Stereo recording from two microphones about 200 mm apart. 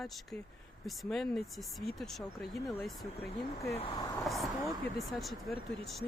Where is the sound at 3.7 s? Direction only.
25° left (ahead or behind).